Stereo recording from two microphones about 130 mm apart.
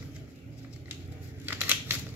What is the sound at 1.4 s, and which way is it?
Scissors, 15° right (ahead or behind).